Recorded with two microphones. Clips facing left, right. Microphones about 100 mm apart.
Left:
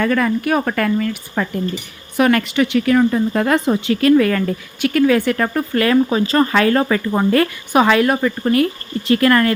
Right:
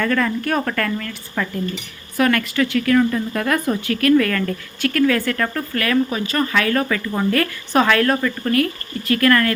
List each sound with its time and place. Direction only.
0.0 s speech: 10° left (ahead or behind); by 7.4 s 30° left (ahead or behind)
7.7 s speech: 15° left (ahead or behind)